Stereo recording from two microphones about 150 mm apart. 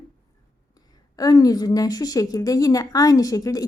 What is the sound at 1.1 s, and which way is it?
A woman's voice, 25° left (ahead or behind).